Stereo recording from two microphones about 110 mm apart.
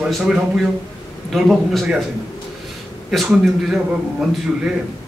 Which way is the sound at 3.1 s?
Centre (ahead or behind).